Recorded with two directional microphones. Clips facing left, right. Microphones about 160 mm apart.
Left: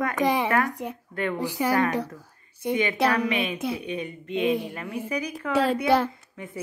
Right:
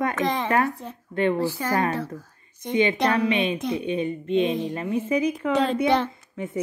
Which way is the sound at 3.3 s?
25° right (ahead or behind).